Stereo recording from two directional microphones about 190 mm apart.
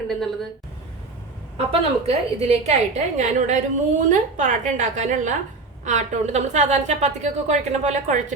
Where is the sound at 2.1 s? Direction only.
35° right (ahead or behind).